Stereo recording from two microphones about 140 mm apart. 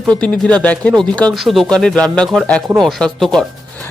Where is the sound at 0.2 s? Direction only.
10° left (ahead or behind).